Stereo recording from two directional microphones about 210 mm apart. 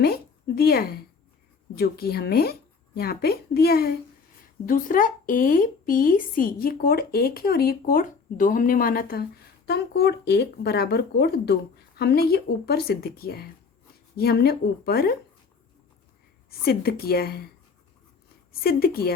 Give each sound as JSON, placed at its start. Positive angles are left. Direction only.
{"t": 0.0, "sound": "a sound", "side_deg": 50}
{"t": 1.8, "sound": "speech", "side_deg": 45}
{"t": 16.5, "sound": "speech", "side_deg": 45}
{"t": 18.6, "sound": "speech", "side_deg": 45}